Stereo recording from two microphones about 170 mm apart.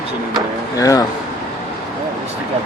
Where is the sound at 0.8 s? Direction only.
20° left (ahead or behind).